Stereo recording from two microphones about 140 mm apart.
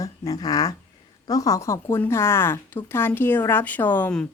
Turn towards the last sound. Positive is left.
turn(degrees=10)  # may be behind; listen again after turning